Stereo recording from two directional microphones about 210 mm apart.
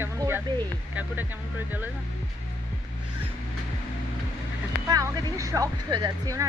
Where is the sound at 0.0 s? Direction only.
10° right (ahead or behind).